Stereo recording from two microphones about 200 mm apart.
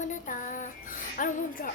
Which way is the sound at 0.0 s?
40° left (ahead or behind).